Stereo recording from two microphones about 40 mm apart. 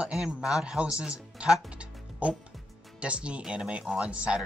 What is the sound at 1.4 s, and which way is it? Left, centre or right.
Speech, right.